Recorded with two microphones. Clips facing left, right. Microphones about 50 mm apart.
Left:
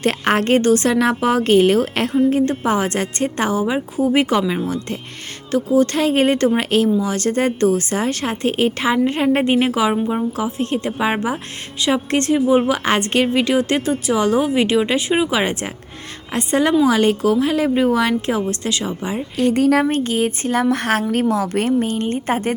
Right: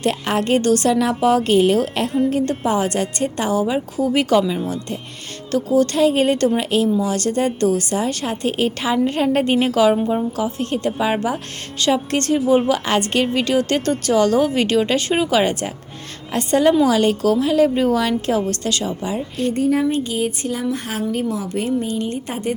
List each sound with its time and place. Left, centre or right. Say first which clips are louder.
0.0 s a woman's voice: left 2 dB; left
0.6 s a woman's voice: left 1 dB; left
10.3 s a woman's voice: left 1 dB; left
13.8 s a woman's voice: right 1 dB; centre
19.5 s speech: left 3 dB; left
19.8 s speech: left 2 dB; left